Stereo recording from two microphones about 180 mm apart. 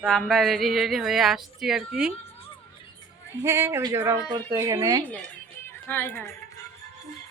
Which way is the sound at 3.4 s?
15° right (ahead or behind).